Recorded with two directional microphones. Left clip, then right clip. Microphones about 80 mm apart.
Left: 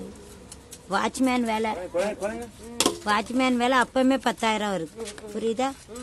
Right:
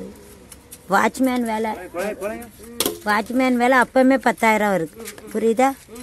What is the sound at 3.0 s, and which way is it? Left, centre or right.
Speech, right.